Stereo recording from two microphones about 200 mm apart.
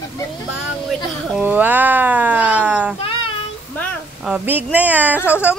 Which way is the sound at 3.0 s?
25° left (ahead or behind).